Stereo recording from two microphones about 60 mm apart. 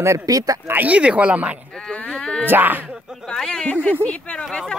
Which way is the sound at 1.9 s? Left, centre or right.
Left.